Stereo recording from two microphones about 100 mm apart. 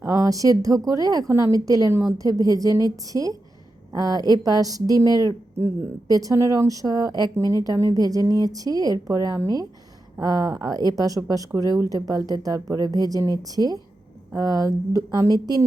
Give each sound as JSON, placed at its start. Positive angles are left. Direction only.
{"t": 0.1, "sound": "a woman's voice", "side_deg": -35}